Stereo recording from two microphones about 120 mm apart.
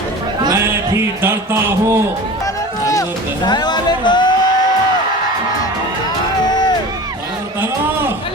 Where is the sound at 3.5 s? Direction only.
35° left (ahead or behind).